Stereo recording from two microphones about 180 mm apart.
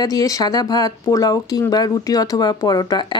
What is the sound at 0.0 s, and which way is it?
Speech, 20° left (ahead or behind).